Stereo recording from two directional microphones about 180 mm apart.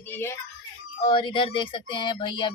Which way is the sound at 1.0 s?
25° left (ahead or behind).